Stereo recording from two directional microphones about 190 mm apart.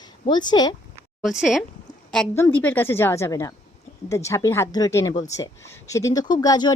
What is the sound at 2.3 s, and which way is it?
A woman's voice, 10° left (ahead or behind).